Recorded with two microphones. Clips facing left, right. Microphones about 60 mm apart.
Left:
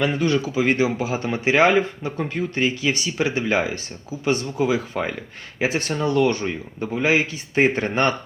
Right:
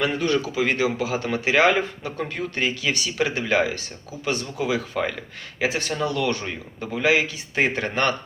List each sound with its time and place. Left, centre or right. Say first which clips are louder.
0.0 s a man's voice: left 2 dB; left
6.4 s a man's voice: left 5 dB; centre